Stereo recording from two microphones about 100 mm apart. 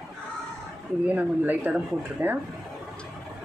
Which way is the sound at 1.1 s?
15° right (ahead or behind).